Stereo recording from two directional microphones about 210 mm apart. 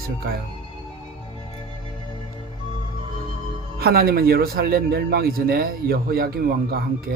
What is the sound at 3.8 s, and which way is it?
Speech, 45° right (ahead or behind).